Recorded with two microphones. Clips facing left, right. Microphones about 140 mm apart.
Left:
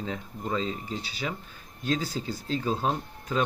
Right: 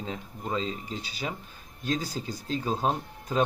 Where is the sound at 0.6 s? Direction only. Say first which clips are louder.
Left 2 dB; 35° left (ahead or behind).